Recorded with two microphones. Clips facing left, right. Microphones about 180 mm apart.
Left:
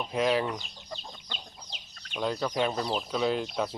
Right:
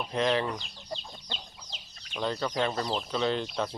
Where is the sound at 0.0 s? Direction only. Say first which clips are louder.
Left 1 dB; 5° left (ahead or behind).